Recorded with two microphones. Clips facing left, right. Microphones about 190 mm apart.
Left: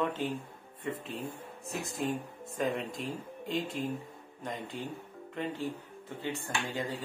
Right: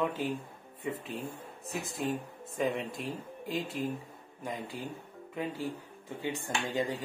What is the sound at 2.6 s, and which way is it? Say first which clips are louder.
Speech: right 1 dB; centre (ahead or behind).